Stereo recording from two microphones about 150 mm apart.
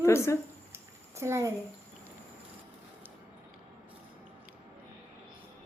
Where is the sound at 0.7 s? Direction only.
15° right (ahead or behind).